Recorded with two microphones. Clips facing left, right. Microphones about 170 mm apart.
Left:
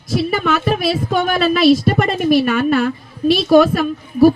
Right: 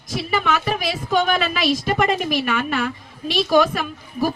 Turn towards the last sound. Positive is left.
turn(degrees=40)  # may be behind; listen again after turning